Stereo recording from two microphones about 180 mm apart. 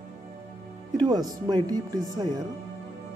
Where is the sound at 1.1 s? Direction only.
20° right (ahead or behind).